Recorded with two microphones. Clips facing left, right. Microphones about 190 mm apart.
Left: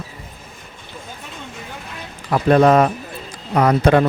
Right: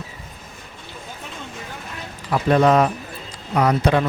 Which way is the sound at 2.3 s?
50° left (ahead or behind).